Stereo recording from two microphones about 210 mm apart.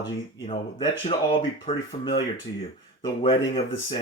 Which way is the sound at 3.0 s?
25° left (ahead or behind).